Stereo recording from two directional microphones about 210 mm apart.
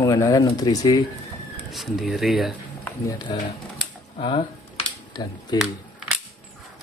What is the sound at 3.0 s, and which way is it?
Speech, 20° left (ahead or behind).